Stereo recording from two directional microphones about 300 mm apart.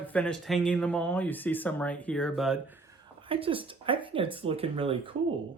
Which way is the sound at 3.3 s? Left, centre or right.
Centre.